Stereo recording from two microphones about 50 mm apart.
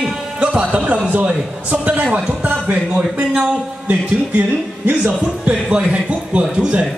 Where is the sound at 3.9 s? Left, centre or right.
Right.